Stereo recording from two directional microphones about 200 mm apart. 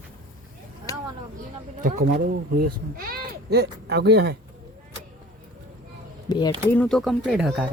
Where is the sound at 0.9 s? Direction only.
15° left (ahead or behind).